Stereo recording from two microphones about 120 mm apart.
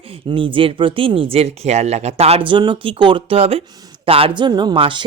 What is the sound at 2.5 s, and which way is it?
Speech, 45° right (ahead or behind).